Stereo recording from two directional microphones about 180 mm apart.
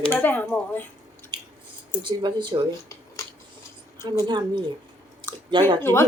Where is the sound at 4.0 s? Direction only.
25° right (ahead or behind).